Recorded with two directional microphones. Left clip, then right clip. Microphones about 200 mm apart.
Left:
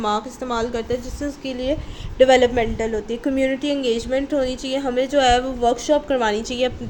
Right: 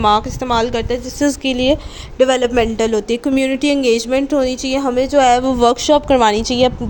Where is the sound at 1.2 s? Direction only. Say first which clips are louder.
Right 10 dB; 45° right (ahead or behind).